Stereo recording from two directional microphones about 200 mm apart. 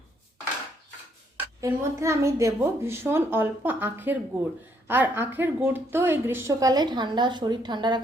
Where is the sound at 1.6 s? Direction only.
15° right (ahead or behind).